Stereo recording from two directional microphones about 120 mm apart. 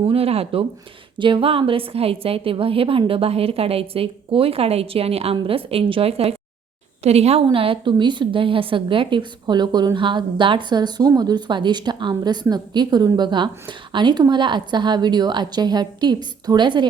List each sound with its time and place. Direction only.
0.0 s a woman's voice: 55° right (ahead or behind)